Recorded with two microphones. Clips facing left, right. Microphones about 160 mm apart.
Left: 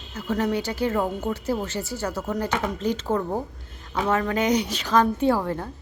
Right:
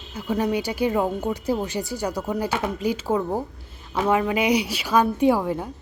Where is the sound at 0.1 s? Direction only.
10° right (ahead or behind).